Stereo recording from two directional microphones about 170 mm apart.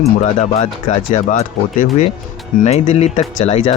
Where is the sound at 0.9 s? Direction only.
45° left (ahead or behind).